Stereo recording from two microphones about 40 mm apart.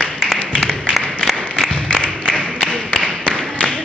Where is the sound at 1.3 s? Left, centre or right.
Left.